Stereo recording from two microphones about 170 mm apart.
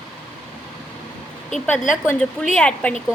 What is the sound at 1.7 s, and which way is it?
Speech, 50° left (ahead or behind).